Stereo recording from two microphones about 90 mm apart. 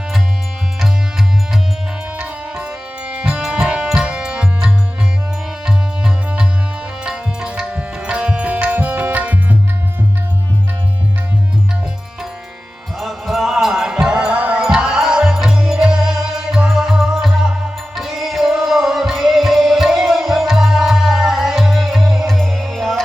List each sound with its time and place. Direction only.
2.1 s music: 15° right (ahead or behind)
7.0 s tabla: 10° right (ahead or behind)
13.0 s music: centre (ahead or behind)